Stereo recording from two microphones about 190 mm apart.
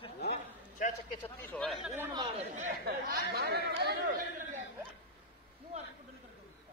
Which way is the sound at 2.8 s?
55° right (ahead or behind).